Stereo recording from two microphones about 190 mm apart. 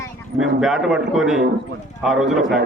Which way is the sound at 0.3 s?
5° right (ahead or behind).